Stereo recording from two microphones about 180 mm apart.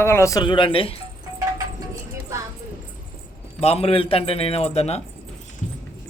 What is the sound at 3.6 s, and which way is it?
A man's voice, 35° left (ahead or behind).